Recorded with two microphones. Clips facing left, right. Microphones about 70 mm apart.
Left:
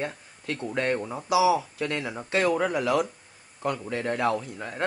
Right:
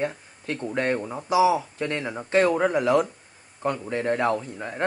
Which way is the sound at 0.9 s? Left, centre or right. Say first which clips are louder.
Right 1 dB; centre.